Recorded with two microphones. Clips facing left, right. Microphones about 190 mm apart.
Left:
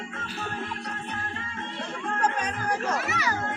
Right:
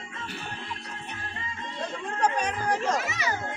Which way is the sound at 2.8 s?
20° right (ahead or behind).